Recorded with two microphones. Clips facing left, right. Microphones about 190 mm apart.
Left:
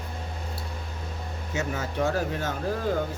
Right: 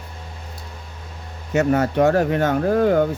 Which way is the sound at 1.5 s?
65° right (ahead or behind).